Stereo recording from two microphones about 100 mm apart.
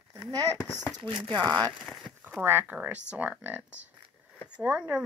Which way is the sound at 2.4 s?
20° right (ahead or behind).